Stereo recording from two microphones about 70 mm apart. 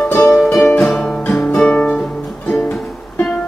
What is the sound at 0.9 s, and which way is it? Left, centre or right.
Music, centre.